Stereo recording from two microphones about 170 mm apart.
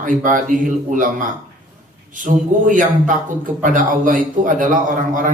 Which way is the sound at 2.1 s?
50° right (ahead or behind).